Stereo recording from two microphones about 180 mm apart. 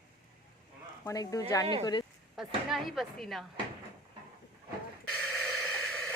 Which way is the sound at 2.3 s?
Centre (ahead or behind).